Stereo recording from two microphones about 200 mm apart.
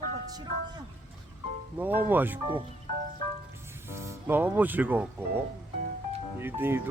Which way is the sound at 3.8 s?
15° right (ahead or behind).